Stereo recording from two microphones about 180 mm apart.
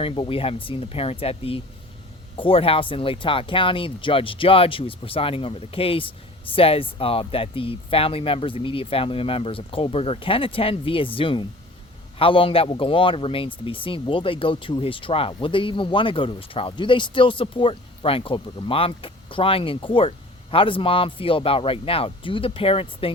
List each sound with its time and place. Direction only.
0.0 s speech: 30° left (ahead or behind)